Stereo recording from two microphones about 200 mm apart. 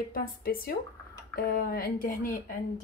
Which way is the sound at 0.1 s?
50° left (ahead or behind).